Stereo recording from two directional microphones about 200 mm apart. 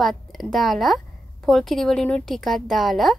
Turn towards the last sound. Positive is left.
turn(degrees=0)  # may be behind; listen again after turning